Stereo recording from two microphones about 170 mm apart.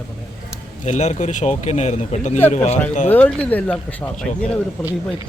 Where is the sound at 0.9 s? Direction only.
45° left (ahead or behind).